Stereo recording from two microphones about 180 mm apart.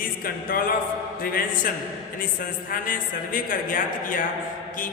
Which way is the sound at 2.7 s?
50° left (ahead or behind).